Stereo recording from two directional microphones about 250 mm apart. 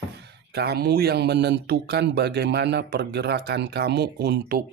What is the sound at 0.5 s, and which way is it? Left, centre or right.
Speech, right.